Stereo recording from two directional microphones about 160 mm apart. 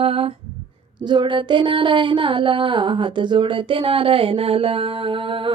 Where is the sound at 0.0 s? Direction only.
35° right (ahead or behind).